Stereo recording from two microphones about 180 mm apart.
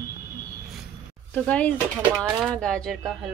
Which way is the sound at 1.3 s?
10° left (ahead or behind).